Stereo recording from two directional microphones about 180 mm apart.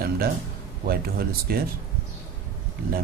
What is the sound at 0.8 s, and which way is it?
Speech, 55° right (ahead or behind).